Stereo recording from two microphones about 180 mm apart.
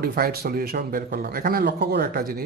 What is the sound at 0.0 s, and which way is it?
A man's voice, 60° right (ahead or behind).